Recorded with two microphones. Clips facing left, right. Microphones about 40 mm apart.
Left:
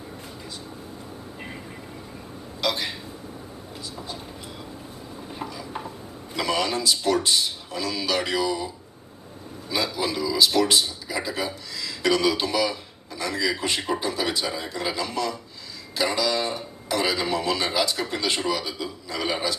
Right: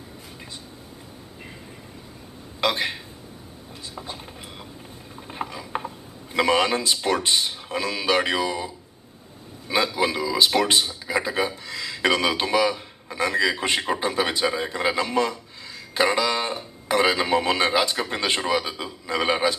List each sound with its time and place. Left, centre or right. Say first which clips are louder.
2.6 s a man's voice: right 3 dB; right
3.9 s speech: right 2 dB; right
5.3 s stir: right 4 dB; right
6.3 s speech: right 5 dB; right
9.6 s a man's voice: right 4 dB; right